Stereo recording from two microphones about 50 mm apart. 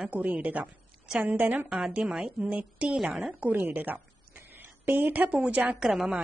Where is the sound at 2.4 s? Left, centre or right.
Right.